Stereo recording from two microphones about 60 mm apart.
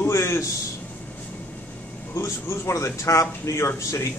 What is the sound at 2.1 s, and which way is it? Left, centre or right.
A man's voice, left.